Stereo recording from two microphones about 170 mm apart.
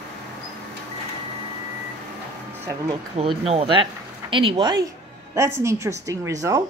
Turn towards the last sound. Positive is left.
turn(degrees=-20)  # may be behind; listen again after turning